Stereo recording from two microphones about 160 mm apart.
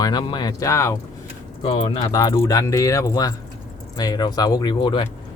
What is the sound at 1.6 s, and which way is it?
Speech, 35° left (ahead or behind).